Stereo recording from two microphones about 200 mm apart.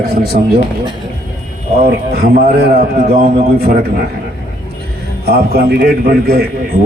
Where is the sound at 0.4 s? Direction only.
50° right (ahead or behind).